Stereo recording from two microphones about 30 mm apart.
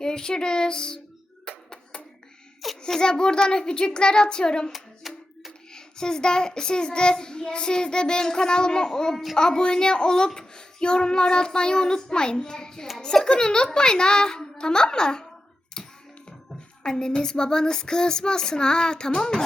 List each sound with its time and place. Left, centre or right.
0.0 s a child's voice: left
1.5 s a sound: left
2.8 s a child's voice: left
4.7 s music: centre
5.7 s a child's voice: left
15.8 s hands: left
16.8 s a woman's voice: left